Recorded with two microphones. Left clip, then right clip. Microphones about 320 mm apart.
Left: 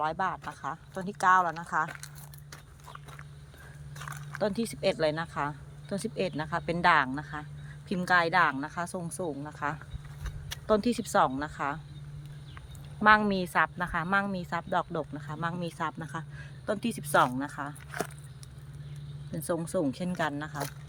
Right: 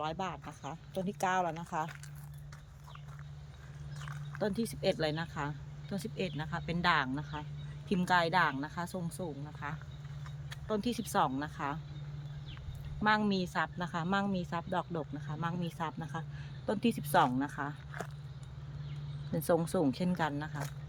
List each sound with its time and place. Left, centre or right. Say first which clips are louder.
0.0 s a woman's voice: left 7 dB; centre
4.4 s a woman's voice: left 5 dB; centre
13.0 s a woman's voice: left 8 dB; centre
19.4 s speech: even; centre